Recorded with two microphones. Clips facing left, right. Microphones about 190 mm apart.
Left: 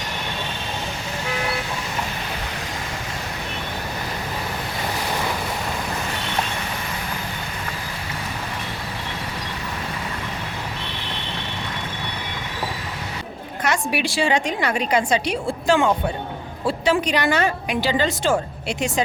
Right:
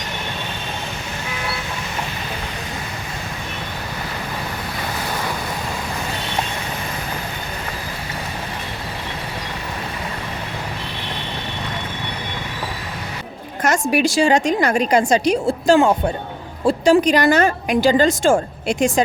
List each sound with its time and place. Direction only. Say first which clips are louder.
13.6 s a woman's voice: right 5 dB; 45° right (ahead or behind)
16.6 s music: right 6 dB; 45° right (ahead or behind)
17.1 s a woman's voice: right 5 dB; 45° right (ahead or behind)